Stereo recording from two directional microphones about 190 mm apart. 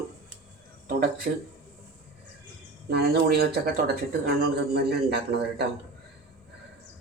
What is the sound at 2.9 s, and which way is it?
Speech, 60° right (ahead or behind).